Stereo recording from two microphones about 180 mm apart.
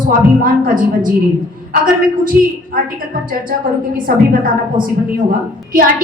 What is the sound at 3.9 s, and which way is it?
A woman's voice, 50° right (ahead or behind).